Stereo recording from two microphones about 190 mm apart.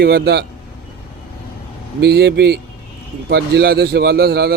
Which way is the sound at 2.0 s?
60° right (ahead or behind).